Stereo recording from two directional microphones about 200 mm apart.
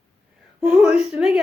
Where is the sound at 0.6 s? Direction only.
5° right (ahead or behind).